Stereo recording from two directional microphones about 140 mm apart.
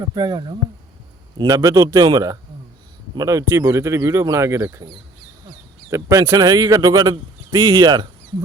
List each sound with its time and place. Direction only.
0.1 s speech: 30° right (ahead or behind)
5.9 s speech: 20° right (ahead or behind)